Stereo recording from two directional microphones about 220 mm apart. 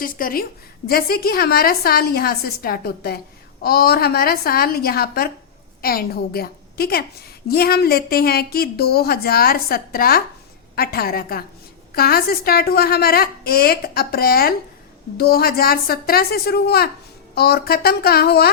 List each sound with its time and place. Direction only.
0.0 s a woman's voice: 40° left (ahead or behind)